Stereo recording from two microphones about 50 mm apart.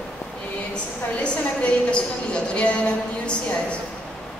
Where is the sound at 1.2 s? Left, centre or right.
Left.